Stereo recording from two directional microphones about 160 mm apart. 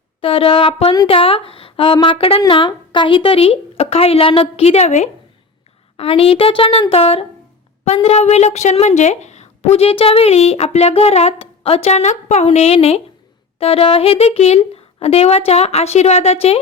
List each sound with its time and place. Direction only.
0.2 s a woman's voice: 35° left (ahead or behind)